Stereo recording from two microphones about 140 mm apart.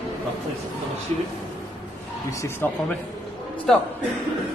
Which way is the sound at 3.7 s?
5° left (ahead or behind).